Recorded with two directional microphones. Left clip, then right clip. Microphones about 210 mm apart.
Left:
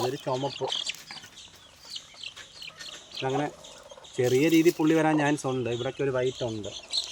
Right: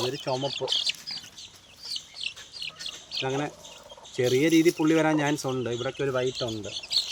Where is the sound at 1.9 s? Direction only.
10° right (ahead or behind).